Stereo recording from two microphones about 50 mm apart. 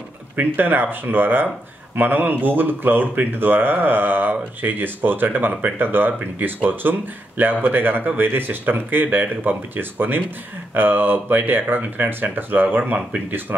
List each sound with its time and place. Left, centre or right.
0.4 s speech: right